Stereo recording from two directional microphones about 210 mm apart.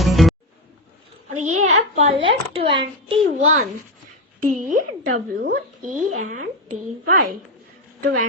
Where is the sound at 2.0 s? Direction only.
25° right (ahead or behind).